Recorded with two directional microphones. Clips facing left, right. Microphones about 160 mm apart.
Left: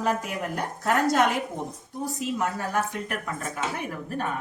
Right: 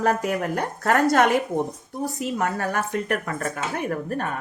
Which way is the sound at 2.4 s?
60° right (ahead or behind).